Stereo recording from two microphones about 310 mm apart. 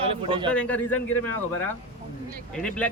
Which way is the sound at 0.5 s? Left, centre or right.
Centre.